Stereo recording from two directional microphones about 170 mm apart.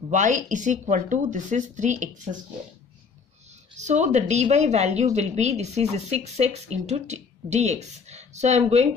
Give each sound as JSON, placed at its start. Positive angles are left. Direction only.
{"t": 0.1, "sound": "speech", "side_deg": -45}
{"t": 3.7, "sound": "a woman's voice", "side_deg": -45}